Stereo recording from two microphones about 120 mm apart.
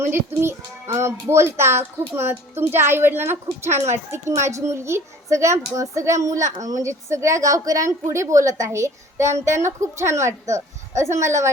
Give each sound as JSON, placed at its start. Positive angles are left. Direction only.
{"t": 0.0, "sound": "a child's voice", "side_deg": -20}
{"t": 3.7, "sound": "speech", "side_deg": -70}
{"t": 3.9, "sound": "a child's voice", "side_deg": -25}